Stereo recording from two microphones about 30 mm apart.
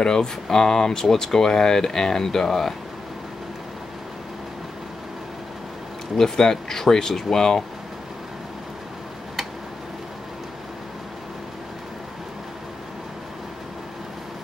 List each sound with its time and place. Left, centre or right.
0.0 s speech: left
6.1 s speech: centre